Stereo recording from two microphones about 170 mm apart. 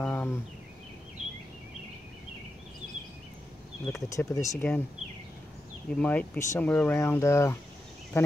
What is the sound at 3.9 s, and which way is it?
Speech, 20° left (ahead or behind).